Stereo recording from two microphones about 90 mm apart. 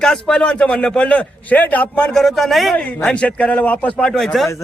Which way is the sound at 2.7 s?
15° left (ahead or behind).